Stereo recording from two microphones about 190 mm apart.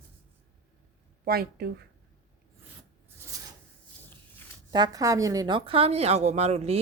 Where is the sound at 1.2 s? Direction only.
55° right (ahead or behind).